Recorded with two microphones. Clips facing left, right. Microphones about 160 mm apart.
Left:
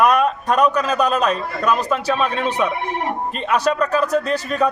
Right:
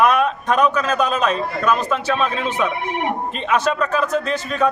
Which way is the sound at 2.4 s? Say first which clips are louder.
Left 1 dB; 35° left (ahead or behind).